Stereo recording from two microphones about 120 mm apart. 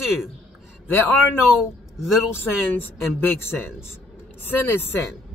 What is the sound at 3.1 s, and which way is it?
Speech, 20° left (ahead or behind).